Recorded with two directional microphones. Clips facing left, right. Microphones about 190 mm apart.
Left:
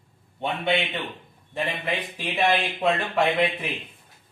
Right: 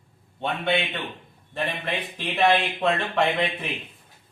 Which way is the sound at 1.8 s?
10° left (ahead or behind).